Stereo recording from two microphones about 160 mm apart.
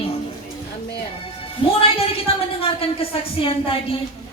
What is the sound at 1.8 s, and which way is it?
A woman's voice, 35° left (ahead or behind).